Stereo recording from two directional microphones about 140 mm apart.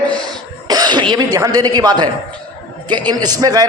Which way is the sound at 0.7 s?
30° right (ahead or behind).